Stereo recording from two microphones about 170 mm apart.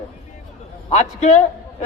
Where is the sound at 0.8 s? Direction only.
40° left (ahead or behind).